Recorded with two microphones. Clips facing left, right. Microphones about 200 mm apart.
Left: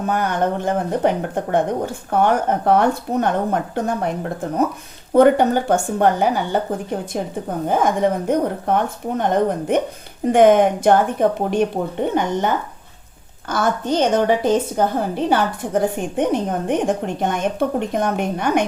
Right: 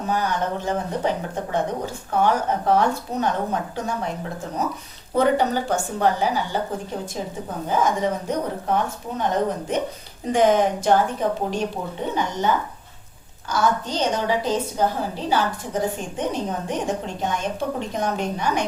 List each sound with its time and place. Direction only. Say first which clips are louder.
0.1 s a woman's voice: left 3 dB; 55° left (ahead or behind)
7.7 s a woman's voice: left 4 dB; 55° left (ahead or behind)
13.5 s a woman's voice: left 3 dB; 55° left (ahead or behind)